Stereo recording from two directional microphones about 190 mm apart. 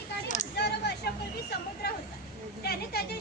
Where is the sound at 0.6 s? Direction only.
60° left (ahead or behind).